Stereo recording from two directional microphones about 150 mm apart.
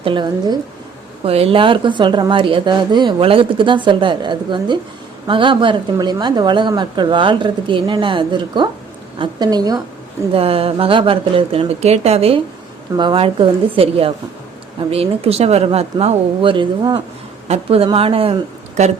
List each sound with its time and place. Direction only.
0.0 s a woman's voice: 35° right (ahead or behind)
1.2 s a woman's voice: 40° right (ahead or behind)
10.3 s a woman's voice: 40° right (ahead or behind)